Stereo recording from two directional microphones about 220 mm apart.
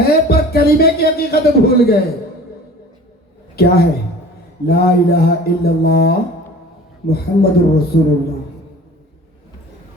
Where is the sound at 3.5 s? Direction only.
45° left (ahead or behind).